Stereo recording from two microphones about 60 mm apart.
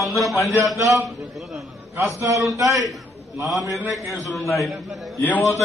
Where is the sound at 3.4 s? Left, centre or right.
Centre.